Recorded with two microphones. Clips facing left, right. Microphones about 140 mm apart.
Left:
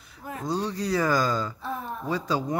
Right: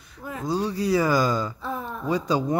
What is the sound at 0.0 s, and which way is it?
Speech, centre (ahead or behind).